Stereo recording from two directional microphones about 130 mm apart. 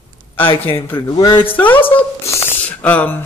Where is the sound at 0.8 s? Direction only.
15° left (ahead or behind).